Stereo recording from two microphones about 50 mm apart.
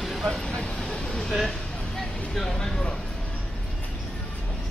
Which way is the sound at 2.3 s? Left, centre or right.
Centre.